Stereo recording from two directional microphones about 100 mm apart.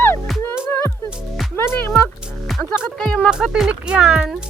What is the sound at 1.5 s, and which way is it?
Speech, 25° left (ahead or behind).